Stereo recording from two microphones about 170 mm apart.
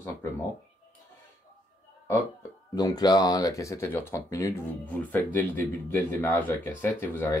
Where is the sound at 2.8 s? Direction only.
25° left (ahead or behind).